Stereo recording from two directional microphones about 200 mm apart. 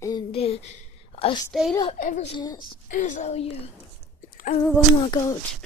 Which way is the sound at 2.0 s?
35° left (ahead or behind).